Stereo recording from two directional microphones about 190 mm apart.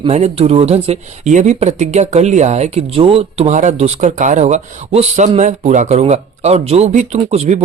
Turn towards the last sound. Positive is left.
turn(degrees=-35)  # may be behind; listen again after turning